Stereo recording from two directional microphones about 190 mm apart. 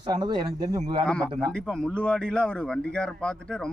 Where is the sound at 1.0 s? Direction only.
5° left (ahead or behind).